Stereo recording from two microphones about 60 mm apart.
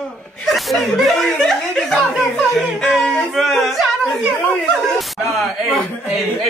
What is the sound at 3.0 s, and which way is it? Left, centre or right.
Speech, centre.